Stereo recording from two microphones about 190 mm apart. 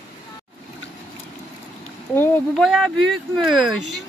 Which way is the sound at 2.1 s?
10° left (ahead or behind).